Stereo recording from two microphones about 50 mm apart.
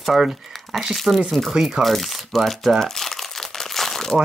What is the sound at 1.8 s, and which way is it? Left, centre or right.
Crumpling, centre.